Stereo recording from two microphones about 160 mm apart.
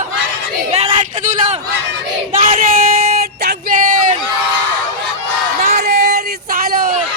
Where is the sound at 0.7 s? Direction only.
40° right (ahead or behind).